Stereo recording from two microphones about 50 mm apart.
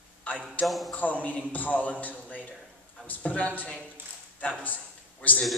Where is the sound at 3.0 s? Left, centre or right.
Left.